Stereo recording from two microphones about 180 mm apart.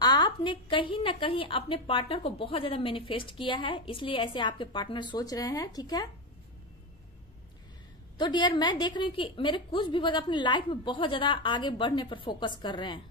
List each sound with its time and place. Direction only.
0.0 s a woman's voice: 25° left (ahead or behind)
8.2 s a woman's voice: 25° left (ahead or behind)